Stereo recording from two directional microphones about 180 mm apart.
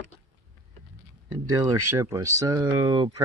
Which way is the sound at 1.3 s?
20° right (ahead or behind).